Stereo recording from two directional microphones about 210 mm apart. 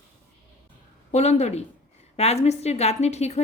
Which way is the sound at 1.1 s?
30° left (ahead or behind).